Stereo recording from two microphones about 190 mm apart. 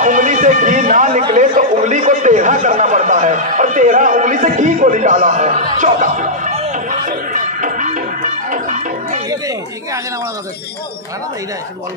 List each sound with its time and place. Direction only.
0.0 s a man's voice: 40° right (ahead or behind)
5.8 s music: 40° right (ahead or behind)